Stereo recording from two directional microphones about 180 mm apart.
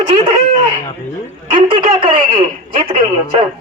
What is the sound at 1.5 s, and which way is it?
A man's voice, 30° right (ahead or behind).